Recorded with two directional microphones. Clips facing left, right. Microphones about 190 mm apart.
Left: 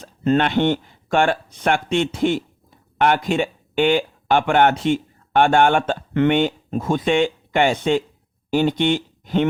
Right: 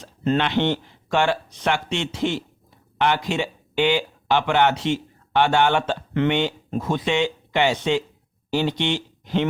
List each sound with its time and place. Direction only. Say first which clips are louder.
0.0 s speech: left 4 dB; 50° left (ahead or behind)